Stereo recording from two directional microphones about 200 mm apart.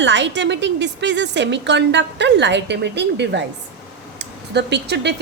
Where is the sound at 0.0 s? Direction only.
65° right (ahead or behind).